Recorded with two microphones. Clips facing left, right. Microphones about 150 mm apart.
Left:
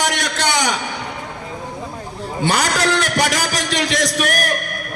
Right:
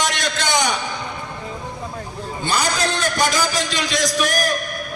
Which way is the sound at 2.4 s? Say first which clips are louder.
Left 3 dB; 75° left (ahead or behind).